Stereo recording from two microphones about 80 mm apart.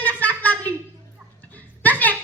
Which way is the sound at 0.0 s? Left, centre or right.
Left.